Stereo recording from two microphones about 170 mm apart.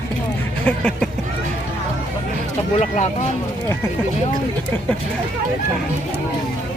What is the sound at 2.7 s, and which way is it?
Speech, 45° left (ahead or behind).